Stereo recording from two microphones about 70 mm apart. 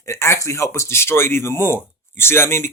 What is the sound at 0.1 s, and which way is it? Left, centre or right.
Speech, left.